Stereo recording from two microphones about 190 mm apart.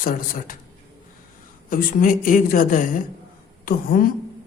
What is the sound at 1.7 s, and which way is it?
Speech, 45° left (ahead or behind).